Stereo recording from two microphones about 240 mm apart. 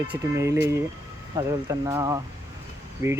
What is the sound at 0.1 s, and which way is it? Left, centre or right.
Speech, centre.